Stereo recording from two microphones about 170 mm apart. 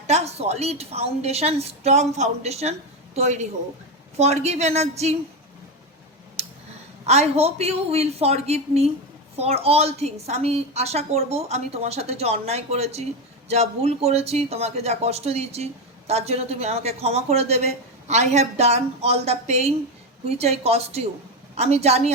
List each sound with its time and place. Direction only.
0.1 s speech: 40° right (ahead or behind)
6.4 s a sound: 40° right (ahead or behind)
7.0 s speech: 40° right (ahead or behind)